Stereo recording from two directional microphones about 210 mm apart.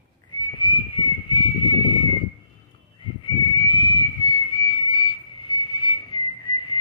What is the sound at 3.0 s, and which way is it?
Whistle, 25° left (ahead or behind).